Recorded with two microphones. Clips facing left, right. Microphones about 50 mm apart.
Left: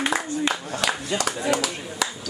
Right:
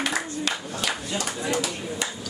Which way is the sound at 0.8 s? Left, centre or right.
Left.